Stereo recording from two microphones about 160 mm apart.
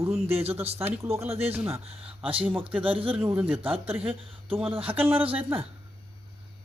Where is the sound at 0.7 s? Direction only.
15° right (ahead or behind).